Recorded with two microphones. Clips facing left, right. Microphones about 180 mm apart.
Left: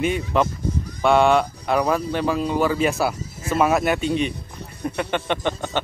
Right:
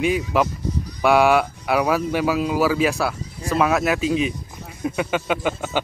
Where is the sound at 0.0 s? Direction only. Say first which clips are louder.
Right 1 dB; 5° right (ahead or behind).